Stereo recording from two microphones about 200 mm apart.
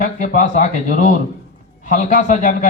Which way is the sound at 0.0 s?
35° left (ahead or behind).